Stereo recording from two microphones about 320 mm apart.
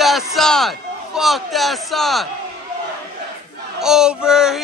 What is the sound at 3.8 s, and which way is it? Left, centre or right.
Speech, centre.